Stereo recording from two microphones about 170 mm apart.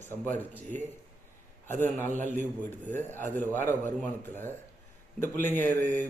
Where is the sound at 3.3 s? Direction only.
10° left (ahead or behind).